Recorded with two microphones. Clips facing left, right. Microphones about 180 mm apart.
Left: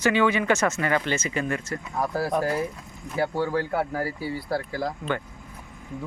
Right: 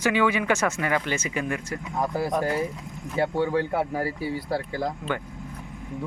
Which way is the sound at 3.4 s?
20° right (ahead or behind).